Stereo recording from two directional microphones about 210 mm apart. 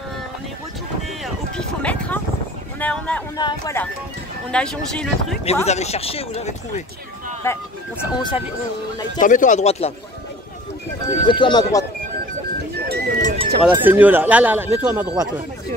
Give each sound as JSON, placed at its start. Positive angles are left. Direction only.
{"t": 1.2, "sound": "music", "side_deg": 5}
{"t": 2.8, "sound": "a sound", "side_deg": 5}
{"t": 3.3, "sound": "speech", "side_deg": 15}
{"t": 5.7, "sound": "speech", "side_deg": 30}
{"t": 7.4, "sound": "speech", "side_deg": 10}
{"t": 8.2, "sound": "speech", "side_deg": 20}
{"t": 9.2, "sound": "speech", "side_deg": 40}
{"t": 11.2, "sound": "speech", "side_deg": 20}
{"t": 12.8, "sound": "music", "side_deg": -45}
{"t": 13.6, "sound": "speech", "side_deg": -5}